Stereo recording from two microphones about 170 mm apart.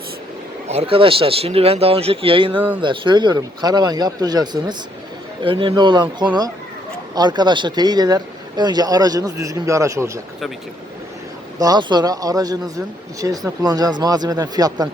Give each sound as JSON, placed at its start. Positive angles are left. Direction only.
{"t": 0.7, "sound": "speech", "side_deg": -35}
{"t": 11.6, "sound": "speech", "side_deg": -25}